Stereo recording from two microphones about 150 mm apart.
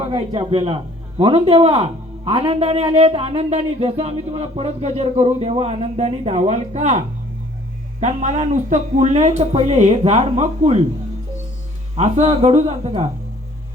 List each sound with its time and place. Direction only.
0.0 s a man's voice: 40° right (ahead or behind)
8.0 s a man's voice: 50° right (ahead or behind)
11.9 s a man's voice: 45° right (ahead or behind)